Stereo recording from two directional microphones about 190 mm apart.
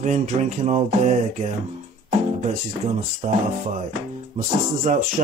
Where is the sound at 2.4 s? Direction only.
40° right (ahead or behind).